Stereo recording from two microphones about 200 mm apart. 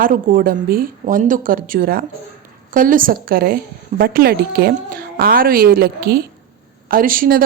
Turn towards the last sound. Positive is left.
turn(degrees=-45)  # may be behind; listen again after turning